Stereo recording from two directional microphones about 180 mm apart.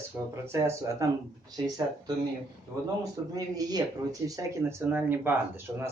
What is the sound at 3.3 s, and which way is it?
Speech, 20° right (ahead or behind).